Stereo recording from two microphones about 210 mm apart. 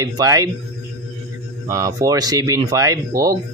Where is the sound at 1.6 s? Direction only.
15° right (ahead or behind).